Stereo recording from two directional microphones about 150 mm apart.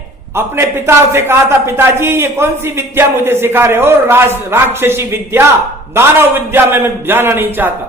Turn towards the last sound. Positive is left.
turn(degrees=-15)  # may be behind; listen again after turning